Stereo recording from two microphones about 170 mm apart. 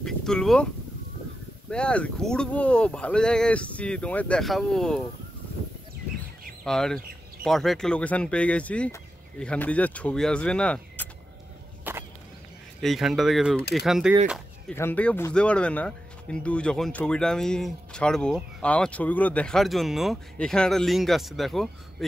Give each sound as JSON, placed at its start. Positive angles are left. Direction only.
{"t": 0.0, "sound": "a sound", "side_deg": 5}
{"t": 1.7, "sound": "speech", "side_deg": 5}
{"t": 6.6, "sound": "speech", "side_deg": 5}
{"t": 11.9, "sound": "a sound", "side_deg": -10}
{"t": 12.8, "sound": "speech", "side_deg": 0}
{"t": 14.7, "sound": "speech", "side_deg": 10}